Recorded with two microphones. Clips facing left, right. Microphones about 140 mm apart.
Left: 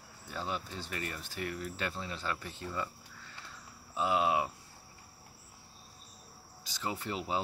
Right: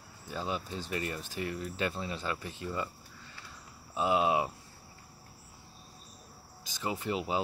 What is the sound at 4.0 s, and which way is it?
Speech, 20° right (ahead or behind).